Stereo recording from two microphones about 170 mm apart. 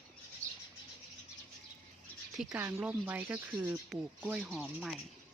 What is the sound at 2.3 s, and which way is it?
Speech, 10° right (ahead or behind).